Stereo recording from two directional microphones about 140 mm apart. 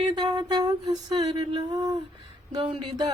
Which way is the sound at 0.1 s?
30° right (ahead or behind).